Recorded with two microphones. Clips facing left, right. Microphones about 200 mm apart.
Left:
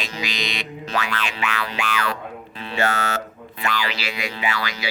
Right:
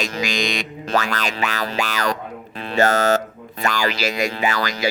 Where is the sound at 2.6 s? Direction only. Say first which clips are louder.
Right 7 dB; 40° right (ahead or behind).